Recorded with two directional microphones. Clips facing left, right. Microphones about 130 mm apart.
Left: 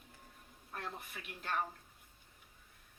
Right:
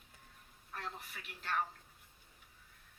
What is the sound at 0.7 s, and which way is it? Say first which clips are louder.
Speech: left 1 dB; 45° left (ahead or behind).